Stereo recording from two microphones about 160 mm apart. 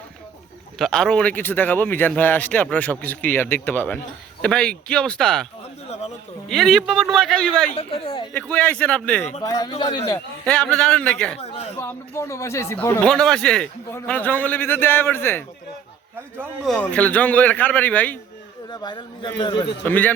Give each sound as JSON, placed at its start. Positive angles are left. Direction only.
{"t": 0.8, "sound": "a man's voice", "side_deg": 5}
{"t": 6.5, "sound": "speech", "side_deg": 0}
{"t": 7.7, "sound": "speech", "side_deg": 35}
{"t": 8.3, "sound": "a man's voice", "side_deg": 10}
{"t": 9.4, "sound": "a man's voice", "side_deg": 25}
{"t": 10.4, "sound": "speech", "side_deg": 5}
{"t": 11.3, "sound": "a sound", "side_deg": 40}
{"t": 11.8, "sound": "a man's voice", "side_deg": 15}
{"t": 13.1, "sound": "a man's voice", "side_deg": 5}
{"t": 16.6, "sound": "a man's voice", "side_deg": 5}
{"t": 18.7, "sound": "a man's voice", "side_deg": 25}
{"t": 19.8, "sound": "a man's voice", "side_deg": 10}